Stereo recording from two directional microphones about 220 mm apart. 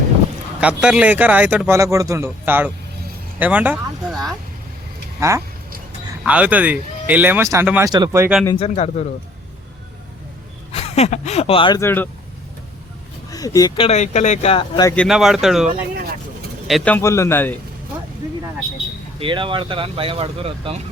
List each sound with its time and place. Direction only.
0.6 s speech: 5° right (ahead or behind)
5.2 s speech: 15° right (ahead or behind)
8.4 s speech: 25° left (ahead or behind)
10.7 s speech: 25° left (ahead or behind); by 12.0 s 10° left (ahead or behind)
13.3 s speech: 15° left (ahead or behind)
14.9 s a man's voice: centre (ahead or behind)
19.2 s speech: 20° right (ahead or behind)